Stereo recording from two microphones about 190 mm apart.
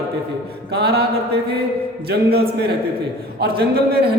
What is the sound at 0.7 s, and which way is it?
Speech, 60° right (ahead or behind).